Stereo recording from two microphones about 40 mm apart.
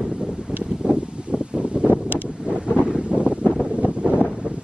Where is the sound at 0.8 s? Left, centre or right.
Right.